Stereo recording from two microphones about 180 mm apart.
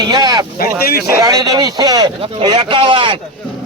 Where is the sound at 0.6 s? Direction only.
55° left (ahead or behind).